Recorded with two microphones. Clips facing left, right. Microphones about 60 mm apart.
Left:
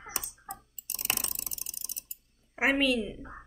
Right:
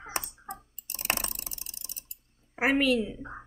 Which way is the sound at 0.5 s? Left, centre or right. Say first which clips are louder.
Right 2 dB; right.